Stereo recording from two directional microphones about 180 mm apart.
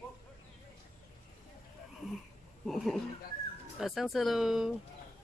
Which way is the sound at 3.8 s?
Centre (ahead or behind).